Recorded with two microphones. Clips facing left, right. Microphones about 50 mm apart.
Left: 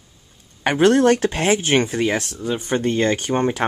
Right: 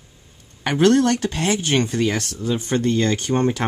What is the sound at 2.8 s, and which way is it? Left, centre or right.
Speech, left.